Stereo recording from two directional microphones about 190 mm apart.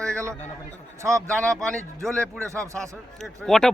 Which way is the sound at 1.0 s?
15° right (ahead or behind).